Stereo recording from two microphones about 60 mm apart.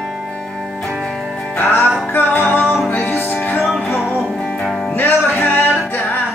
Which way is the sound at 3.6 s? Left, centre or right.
Centre.